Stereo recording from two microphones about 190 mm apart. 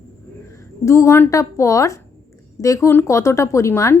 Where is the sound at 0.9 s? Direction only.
15° left (ahead or behind).